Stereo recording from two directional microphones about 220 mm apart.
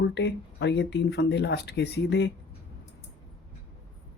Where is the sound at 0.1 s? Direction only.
50° left (ahead or behind).